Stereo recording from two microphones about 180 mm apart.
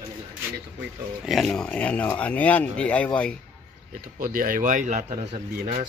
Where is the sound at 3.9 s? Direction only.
50° right (ahead or behind).